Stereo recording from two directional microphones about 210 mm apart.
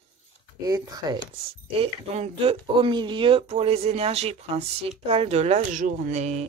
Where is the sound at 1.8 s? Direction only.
30° right (ahead or behind).